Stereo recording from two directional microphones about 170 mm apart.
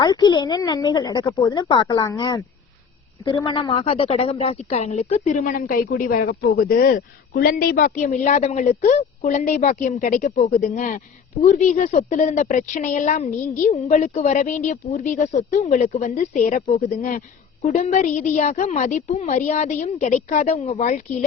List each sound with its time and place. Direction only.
0.0 s a woman's voice: 25° left (ahead or behind)
1.6 s a woman's voice: 30° left (ahead or behind)